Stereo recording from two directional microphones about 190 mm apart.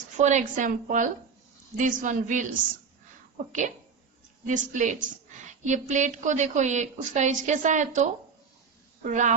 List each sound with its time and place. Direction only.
0.2 s a woman's voice: 40° right (ahead or behind)
9.0 s a woman's voice: 40° right (ahead or behind)